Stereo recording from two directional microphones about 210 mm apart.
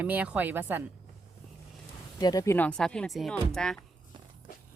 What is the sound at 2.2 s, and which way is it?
Speech, 20° left (ahead or behind).